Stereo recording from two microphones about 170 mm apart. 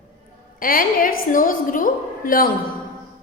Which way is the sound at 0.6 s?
55° left (ahead or behind).